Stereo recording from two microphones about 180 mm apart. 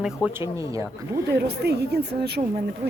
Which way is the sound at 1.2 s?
65° right (ahead or behind).